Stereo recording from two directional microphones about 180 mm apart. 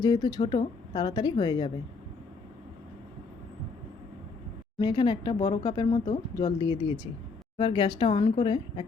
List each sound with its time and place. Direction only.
0.0 s speech: 20° left (ahead or behind)
4.8 s speech: 25° left (ahead or behind)